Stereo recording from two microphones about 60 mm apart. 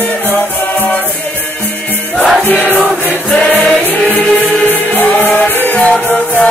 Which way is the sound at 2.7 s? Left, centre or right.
Left.